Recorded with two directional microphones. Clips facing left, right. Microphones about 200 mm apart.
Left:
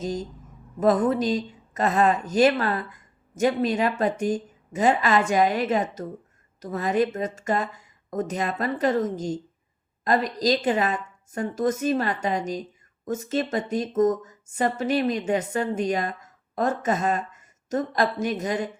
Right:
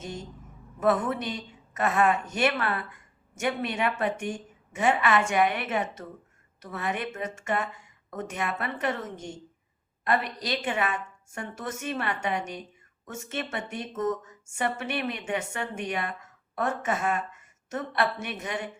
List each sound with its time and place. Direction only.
0.0 s a woman's voice: 35° left (ahead or behind)